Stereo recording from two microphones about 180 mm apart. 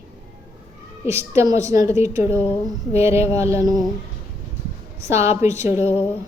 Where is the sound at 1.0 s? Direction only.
15° right (ahead or behind).